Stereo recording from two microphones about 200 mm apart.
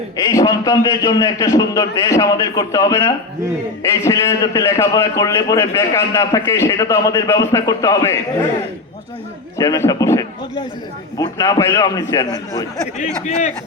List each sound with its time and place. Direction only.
0.3 s a man's voice: 15° left (ahead or behind)
9.6 s a man's voice: 15° left (ahead or behind)
13.0 s a man's voice: 35° left (ahead or behind)